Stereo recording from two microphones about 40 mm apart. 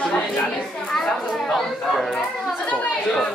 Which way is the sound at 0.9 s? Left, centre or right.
Centre.